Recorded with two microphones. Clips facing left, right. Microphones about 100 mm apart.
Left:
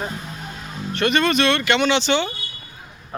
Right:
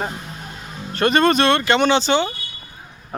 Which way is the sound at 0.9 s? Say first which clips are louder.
Right 3 dB; 40° right (ahead or behind).